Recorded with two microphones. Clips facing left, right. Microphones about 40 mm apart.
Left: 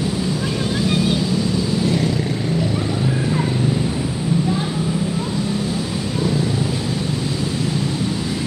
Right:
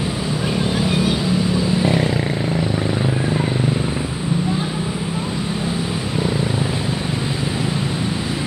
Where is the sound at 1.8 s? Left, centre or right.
Right.